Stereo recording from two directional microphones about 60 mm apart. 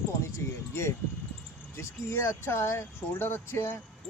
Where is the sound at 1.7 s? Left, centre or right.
Left.